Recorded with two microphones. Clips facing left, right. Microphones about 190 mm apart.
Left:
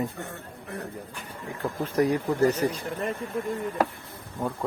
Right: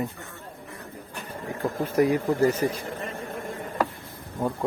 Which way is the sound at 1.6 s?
10° right (ahead or behind).